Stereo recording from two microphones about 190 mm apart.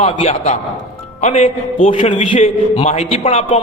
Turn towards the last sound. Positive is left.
turn(degrees=35)  # may be behind; listen again after turning